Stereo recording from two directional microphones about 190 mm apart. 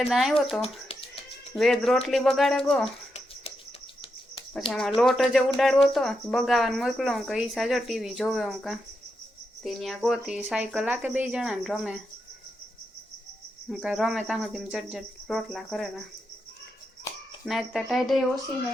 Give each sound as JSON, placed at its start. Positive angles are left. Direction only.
{"t": 0.1, "sound": "speech", "side_deg": 0}
{"t": 0.6, "sound": "a sound", "side_deg": 30}
{"t": 1.5, "sound": "speech", "side_deg": 0}
{"t": 3.1, "sound": "a sound", "side_deg": 35}
{"t": 4.9, "sound": "speech", "side_deg": 0}
{"t": 13.7, "sound": "speech", "side_deg": 0}
{"t": 17.4, "sound": "speech", "side_deg": 0}